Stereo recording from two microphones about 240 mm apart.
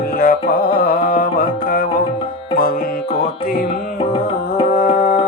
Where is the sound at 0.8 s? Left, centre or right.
Left.